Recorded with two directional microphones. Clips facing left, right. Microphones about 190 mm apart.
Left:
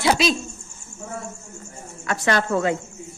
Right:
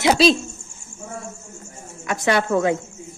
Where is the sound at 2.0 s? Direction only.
15° right (ahead or behind).